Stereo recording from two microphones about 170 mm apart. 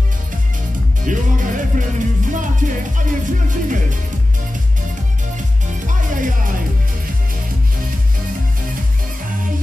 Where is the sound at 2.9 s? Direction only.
50° right (ahead or behind).